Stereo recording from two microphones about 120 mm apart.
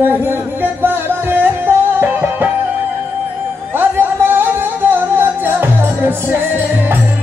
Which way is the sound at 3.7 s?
15° right (ahead or behind).